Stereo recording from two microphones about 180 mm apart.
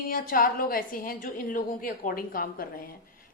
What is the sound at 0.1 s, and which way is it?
A woman's voice, 50° left (ahead or behind).